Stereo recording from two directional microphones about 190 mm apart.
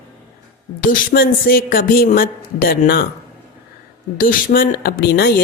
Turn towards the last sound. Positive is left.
turn(degrees=55)  # may be behind; listen again after turning